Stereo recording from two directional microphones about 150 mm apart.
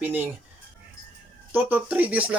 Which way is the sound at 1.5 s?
15° right (ahead or behind).